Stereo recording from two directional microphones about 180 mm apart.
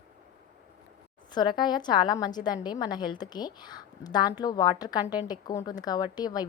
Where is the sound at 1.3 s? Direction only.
25° left (ahead or behind).